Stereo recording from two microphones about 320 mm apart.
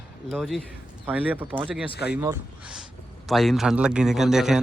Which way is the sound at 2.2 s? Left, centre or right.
Centre.